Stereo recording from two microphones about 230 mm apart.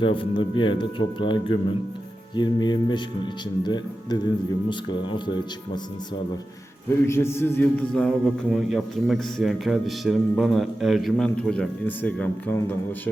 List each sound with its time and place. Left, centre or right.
0.0 s speech: left
4.7 s speech: left
7.1 s a man's voice: centre